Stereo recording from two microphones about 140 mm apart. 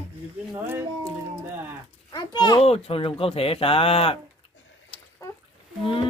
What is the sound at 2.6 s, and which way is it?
Speech, 45° left (ahead or behind).